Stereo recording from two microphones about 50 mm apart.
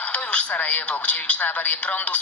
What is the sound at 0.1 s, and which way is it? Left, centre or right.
Speech, left.